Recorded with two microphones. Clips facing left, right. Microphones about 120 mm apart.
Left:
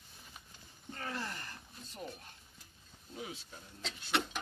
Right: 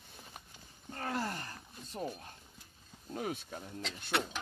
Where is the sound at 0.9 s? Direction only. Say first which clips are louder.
Right 5 dB; 40° right (ahead or behind).